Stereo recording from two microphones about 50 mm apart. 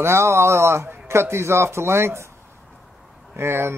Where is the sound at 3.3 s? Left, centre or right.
Right.